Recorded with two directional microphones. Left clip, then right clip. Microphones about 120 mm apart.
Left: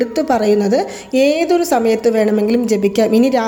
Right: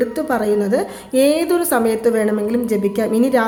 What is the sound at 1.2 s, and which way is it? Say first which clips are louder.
A woman's voice: left 2 dB; 15° left (ahead or behind).